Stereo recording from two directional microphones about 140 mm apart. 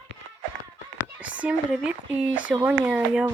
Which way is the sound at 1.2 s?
10° right (ahead or behind).